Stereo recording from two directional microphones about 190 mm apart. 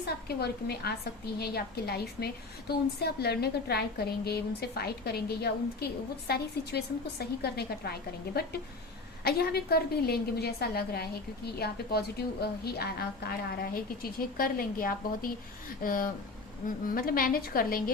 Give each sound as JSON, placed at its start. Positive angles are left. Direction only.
{"t": 0.3, "sound": "a woman's voice", "side_deg": 55}